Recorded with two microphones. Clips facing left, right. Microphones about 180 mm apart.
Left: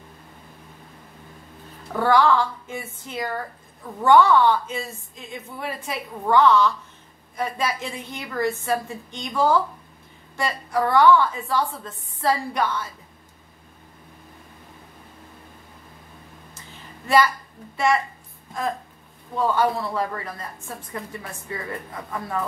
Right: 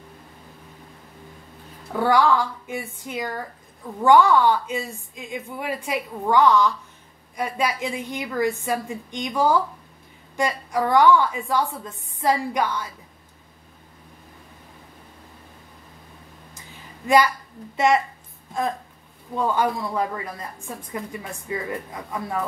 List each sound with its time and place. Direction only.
2.0 s a woman's voice: 10° right (ahead or behind)
17.0 s a woman's voice: 15° right (ahead or behind)
19.3 s a woman's voice: 15° right (ahead or behind)